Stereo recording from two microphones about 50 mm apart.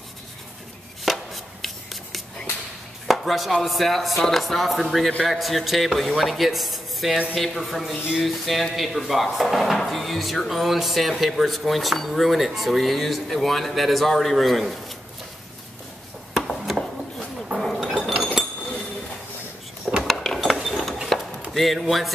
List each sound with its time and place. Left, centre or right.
1.0 s chopping: centre
3.6 s speech: centre
16.4 s a sound: centre
17.6 s chink: centre
20.0 s a sound: centre
21.1 s chop: centre